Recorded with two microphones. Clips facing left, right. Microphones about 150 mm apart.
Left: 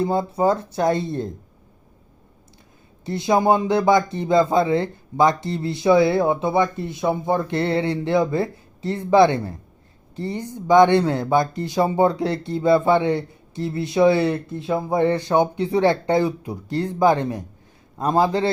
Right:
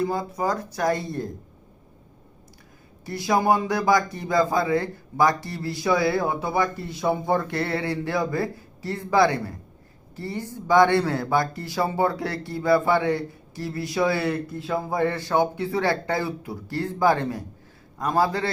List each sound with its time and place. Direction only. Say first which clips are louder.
0.0 s speech: left 5 dB; 25° left (ahead or behind)
3.1 s speech: left 3 dB; 25° left (ahead or behind)